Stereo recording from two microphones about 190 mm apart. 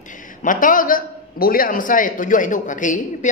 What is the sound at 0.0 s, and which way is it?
A man's voice, 45° left (ahead or behind).